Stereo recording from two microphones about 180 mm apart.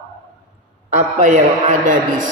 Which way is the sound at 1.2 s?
45° right (ahead or behind).